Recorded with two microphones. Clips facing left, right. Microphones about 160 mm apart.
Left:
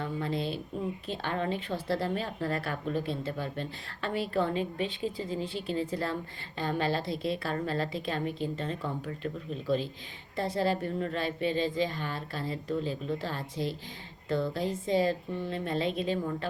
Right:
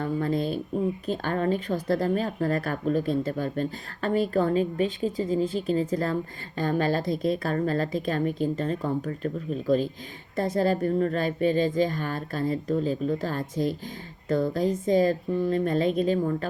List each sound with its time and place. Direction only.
0.0 s speech: 45° right (ahead or behind)